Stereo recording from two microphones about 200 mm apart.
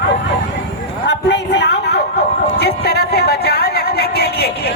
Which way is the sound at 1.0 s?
60° left (ahead or behind).